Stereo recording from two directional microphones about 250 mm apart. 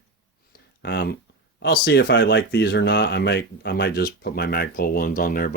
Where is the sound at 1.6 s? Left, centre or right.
Left.